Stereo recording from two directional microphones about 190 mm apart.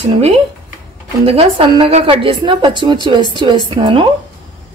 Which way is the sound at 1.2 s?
30° right (ahead or behind).